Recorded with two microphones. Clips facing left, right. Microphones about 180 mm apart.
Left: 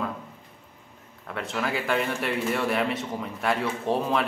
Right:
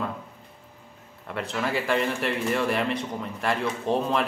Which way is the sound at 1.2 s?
Centre (ahead or behind).